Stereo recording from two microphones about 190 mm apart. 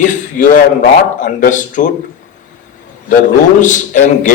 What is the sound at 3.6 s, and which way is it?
Speech, 40° left (ahead or behind).